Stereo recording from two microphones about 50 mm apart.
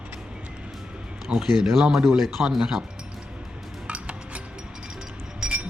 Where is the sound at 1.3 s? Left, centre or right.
Centre.